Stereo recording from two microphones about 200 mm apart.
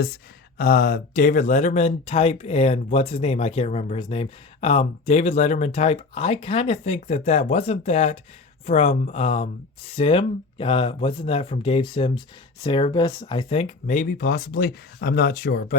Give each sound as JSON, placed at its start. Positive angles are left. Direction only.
{"t": 0.6, "sound": "speech", "side_deg": 45}